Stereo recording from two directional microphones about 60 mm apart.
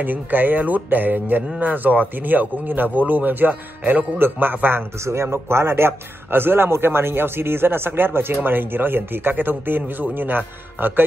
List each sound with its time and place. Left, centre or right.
0.0 s a man's voice: right
5.0 s a man's voice: right